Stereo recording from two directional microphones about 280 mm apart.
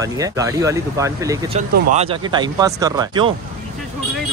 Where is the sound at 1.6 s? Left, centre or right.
Right.